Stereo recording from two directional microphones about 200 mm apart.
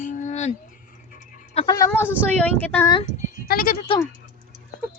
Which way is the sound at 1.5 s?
20° left (ahead or behind).